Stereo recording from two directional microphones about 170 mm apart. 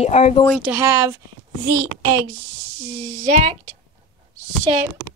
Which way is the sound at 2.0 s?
25° right (ahead or behind).